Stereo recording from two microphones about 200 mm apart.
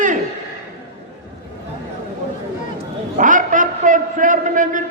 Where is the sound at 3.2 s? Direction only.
40° right (ahead or behind).